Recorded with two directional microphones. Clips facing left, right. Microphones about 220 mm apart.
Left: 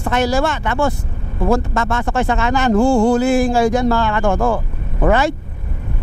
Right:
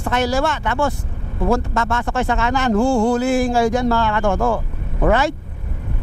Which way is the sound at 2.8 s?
25° left (ahead or behind).